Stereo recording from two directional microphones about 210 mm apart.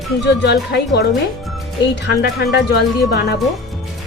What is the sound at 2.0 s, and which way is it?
A woman's voice, 55° left (ahead or behind).